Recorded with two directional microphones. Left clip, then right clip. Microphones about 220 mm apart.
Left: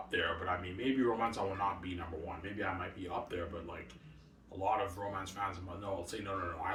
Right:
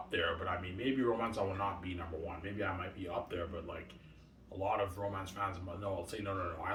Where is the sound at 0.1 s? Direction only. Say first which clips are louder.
Left 1 dB; 10° right (ahead or behind).